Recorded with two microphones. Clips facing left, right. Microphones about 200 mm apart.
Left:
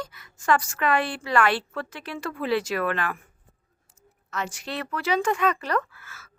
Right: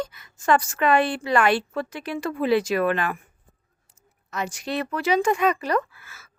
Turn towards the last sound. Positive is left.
turn(degrees=-10)  # may be behind; listen again after turning